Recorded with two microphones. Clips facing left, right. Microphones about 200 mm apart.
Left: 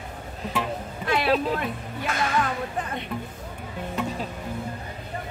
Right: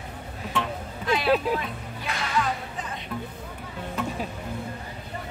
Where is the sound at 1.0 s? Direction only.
60° left (ahead or behind).